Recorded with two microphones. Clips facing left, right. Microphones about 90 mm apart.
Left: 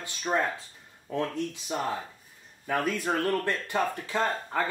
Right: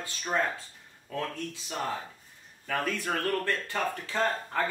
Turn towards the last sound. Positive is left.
turn(degrees=15)  # may be behind; listen again after turning